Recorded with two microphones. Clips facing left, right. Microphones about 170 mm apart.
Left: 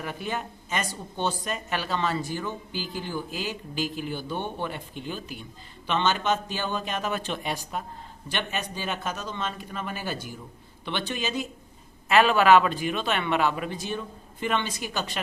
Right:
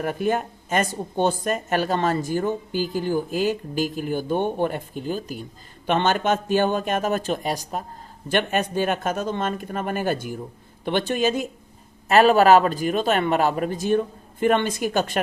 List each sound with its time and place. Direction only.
0.0 s a man's voice: 50° right (ahead or behind)